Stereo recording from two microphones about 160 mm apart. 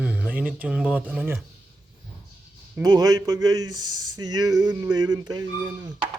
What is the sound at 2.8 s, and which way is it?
Speech, 25° right (ahead or behind).